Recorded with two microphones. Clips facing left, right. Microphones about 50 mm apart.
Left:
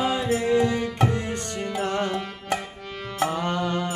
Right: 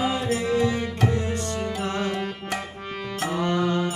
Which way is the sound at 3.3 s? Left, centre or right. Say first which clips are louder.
Right 2 dB; left.